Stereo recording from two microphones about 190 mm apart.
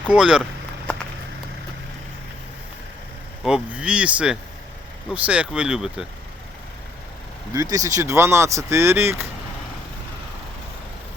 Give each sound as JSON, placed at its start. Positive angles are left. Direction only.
{"t": 0.0, "sound": "speech", "side_deg": -5}
{"t": 3.4, "sound": "speech", "side_deg": -5}
{"t": 7.5, "sound": "speech", "side_deg": -20}